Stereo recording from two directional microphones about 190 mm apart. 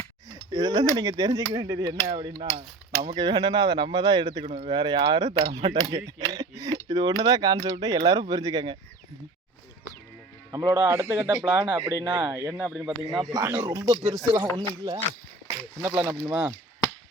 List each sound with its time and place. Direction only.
0.3 s a sound: 20° right (ahead or behind)
0.9 s speech: 20° right (ahead or behind)
10.5 s a man's voice: 15° right (ahead or behind)
13.3 s a man's voice: 20° right (ahead or behind)